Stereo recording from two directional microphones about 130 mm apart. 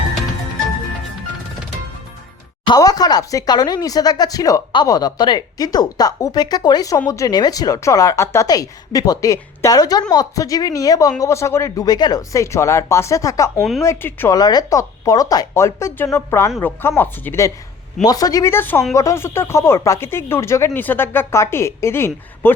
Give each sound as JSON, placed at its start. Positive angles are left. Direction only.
{"t": 2.6, "sound": "speech", "side_deg": 30}
{"t": 13.6, "sound": "a woman's voice", "side_deg": 0}
{"t": 13.8, "sound": "speech", "side_deg": 20}
{"t": 14.3, "sound": "speech", "side_deg": 30}
{"t": 18.0, "sound": "speech", "side_deg": 30}